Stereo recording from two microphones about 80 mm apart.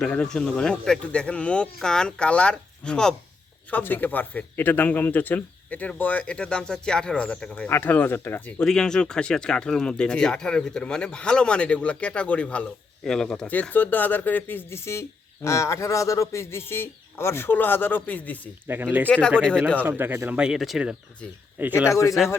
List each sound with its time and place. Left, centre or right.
0.0 s speech: centre
3.7 s speech: left
7.7 s speech: left
8.6 s speech: centre
13.5 s speech: left
18.7 s speech: right
19.0 s speech: centre
19.8 s speech: right
20.4 s speech: centre
21.8 s speech: left